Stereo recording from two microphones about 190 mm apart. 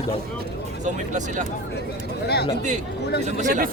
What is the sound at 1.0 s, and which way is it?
Speech, 40° right (ahead or behind).